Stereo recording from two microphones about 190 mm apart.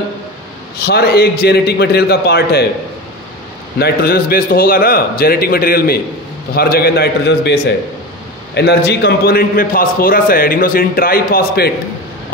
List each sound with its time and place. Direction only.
0.8 s a man's voice: 55° left (ahead or behind)
3.7 s a man's voice: 55° left (ahead or behind)